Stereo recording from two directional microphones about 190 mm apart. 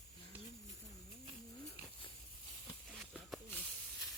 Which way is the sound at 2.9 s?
Centre (ahead or behind).